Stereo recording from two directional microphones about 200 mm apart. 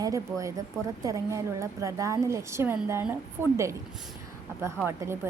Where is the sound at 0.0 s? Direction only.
15° right (ahead or behind).